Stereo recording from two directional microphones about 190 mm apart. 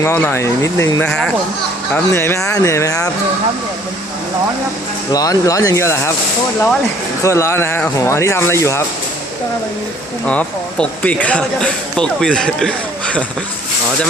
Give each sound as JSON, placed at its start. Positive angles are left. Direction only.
{"t": 0.0, "sound": "speech", "side_deg": 10}
{"t": 5.1, "sound": "speech", "side_deg": 20}
{"t": 7.2, "sound": "speech", "side_deg": 15}
{"t": 10.2, "sound": "speech", "side_deg": 5}